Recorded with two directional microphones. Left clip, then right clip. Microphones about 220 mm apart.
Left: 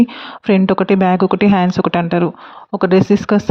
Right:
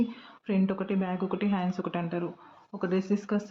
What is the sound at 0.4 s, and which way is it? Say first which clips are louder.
A woman's voice: left 17 dB; 45° left (ahead or behind).